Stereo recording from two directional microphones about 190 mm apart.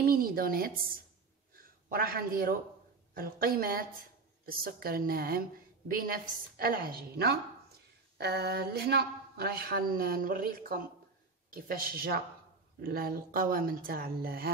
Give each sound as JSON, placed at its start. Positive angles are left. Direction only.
{"t": 0.1, "sound": "a woman's voice", "side_deg": -50}
{"t": 1.5, "sound": "a sound", "side_deg": -50}
{"t": 3.2, "sound": "a woman's voice", "side_deg": -50}